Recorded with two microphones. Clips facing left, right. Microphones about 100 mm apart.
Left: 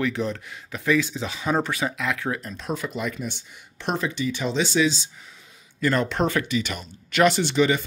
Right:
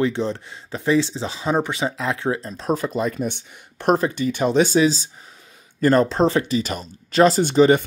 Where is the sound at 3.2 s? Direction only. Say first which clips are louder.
Right 6 dB; 50° right (ahead or behind).